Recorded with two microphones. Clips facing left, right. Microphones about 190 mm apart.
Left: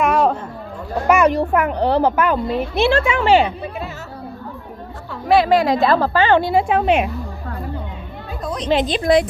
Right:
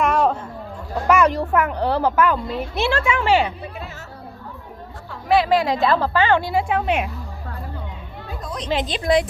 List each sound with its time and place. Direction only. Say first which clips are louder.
0.0 s a sound: left 2 dB; 5° left (ahead or behind)
1.0 s children playing: left 2 dB; 15° left (ahead or behind)
1.4 s a woman's voice: left 3 dB; 20° left (ahead or behind)
5.4 s a woman's voice: left 3 dB; 55° left (ahead or behind)
5.8 s a woman's voice: left 3 dB; 40° left (ahead or behind)
8.5 s a woman's voice: left 6 dB; 70° left (ahead or behind); by 9.2 s 50° left (ahead or behind)